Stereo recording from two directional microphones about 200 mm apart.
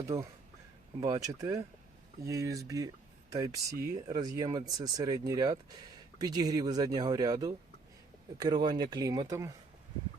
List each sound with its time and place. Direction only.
0.1 s speech: 15° right (ahead or behind)